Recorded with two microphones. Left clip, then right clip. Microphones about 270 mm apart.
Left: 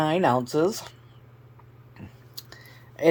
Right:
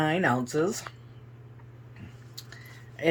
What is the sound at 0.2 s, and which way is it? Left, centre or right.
Speech, centre.